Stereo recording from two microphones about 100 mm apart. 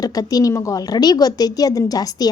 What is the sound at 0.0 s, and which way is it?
A woman's voice, 40° left (ahead or behind).